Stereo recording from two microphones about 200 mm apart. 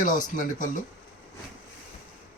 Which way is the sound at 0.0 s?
40° left (ahead or behind).